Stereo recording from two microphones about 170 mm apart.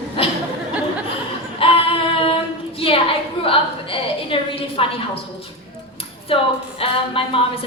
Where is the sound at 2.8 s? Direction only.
35° left (ahead or behind).